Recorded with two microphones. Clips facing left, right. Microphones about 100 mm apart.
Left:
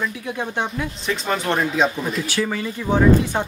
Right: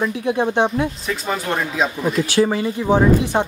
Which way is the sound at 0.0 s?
30° right (ahead or behind).